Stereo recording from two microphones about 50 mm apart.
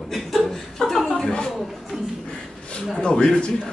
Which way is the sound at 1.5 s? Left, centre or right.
Centre.